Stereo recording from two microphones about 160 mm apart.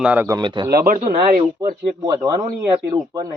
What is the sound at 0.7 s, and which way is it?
Speech, 65° right (ahead or behind).